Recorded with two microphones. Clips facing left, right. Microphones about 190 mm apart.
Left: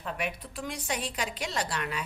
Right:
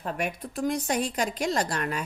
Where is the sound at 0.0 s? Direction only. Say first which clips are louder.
Right 4 dB; 45° right (ahead or behind).